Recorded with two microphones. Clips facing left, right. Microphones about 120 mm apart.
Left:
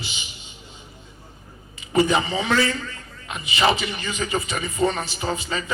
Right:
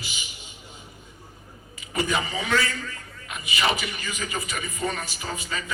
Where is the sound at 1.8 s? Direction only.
30° left (ahead or behind).